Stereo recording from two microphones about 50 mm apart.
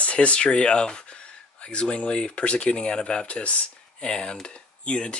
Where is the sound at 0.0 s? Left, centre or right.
Left.